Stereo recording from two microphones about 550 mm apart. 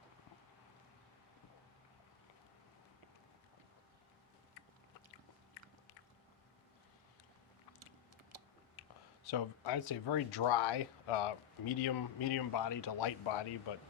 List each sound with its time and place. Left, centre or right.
8.3 s typing: right
8.8 s a sound: left
9.2 s speech: left